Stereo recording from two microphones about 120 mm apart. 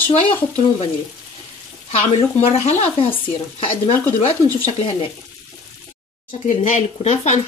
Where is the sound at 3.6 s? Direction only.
50° left (ahead or behind).